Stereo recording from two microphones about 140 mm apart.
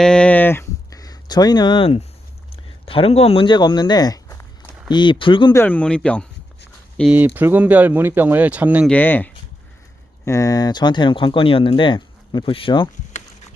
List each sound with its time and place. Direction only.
0.0 s a sound: 5° left (ahead or behind); by 2.0 s 40° left (ahead or behind)
2.8 s speech: 40° left (ahead or behind)
5.5 s speech: 10° left (ahead or behind)
7.1 s speech: 10° right (ahead or behind)
8.9 s speech: 10° left (ahead or behind)
10.2 s speech: 20° left (ahead or behind); by 12.9 s 35° left (ahead or behind)